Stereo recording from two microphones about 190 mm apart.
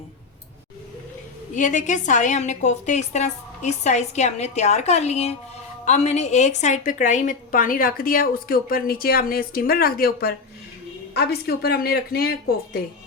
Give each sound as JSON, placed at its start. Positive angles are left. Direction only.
{"t": 1.5, "sound": "a woman's voice", "side_deg": 40}